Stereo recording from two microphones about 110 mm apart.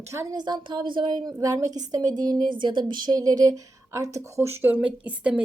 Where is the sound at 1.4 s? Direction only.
35° right (ahead or behind).